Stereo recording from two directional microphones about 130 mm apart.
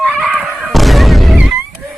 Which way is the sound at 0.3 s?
10° right (ahead or behind).